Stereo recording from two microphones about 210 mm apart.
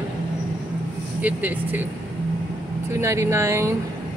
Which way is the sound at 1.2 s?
10° right (ahead or behind).